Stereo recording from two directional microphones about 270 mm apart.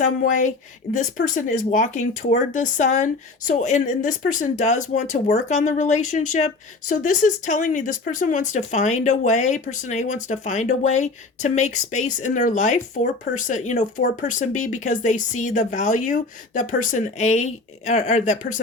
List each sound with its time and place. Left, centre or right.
0.0 s speech: left